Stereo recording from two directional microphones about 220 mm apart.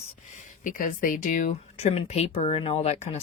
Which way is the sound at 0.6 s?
40° left (ahead or behind).